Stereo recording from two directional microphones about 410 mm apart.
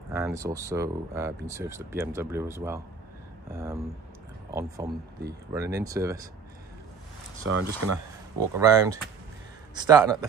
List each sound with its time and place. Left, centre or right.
0.1 s speech: centre
7.4 s speech: right
8.5 s speech: centre